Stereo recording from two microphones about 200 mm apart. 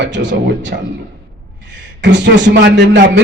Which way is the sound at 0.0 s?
65° right (ahead or behind).